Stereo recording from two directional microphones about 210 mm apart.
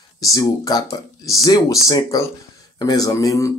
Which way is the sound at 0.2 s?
15° left (ahead or behind).